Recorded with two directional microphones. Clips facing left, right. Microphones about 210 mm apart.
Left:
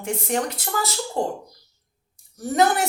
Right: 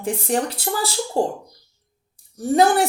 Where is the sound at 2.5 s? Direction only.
30° right (ahead or behind).